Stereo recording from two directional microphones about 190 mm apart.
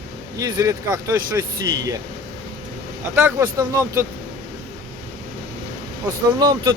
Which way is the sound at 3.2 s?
15° right (ahead or behind).